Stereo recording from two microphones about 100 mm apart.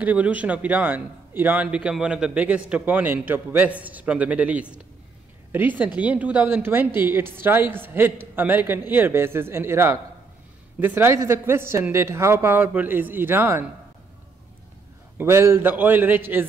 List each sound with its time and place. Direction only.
0.0 s a man's voice: 15° right (ahead or behind)
15.1 s a woman's voice: 25° right (ahead or behind)